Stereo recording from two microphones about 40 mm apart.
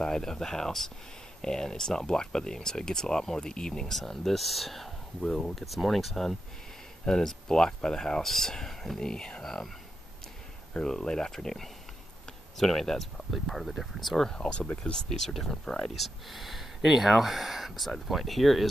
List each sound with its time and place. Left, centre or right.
0.0 s speech: centre
7.1 s speech: centre
9.1 s speech: centre
10.8 s speech: centre
14.3 s speech: left
14.8 s speech: centre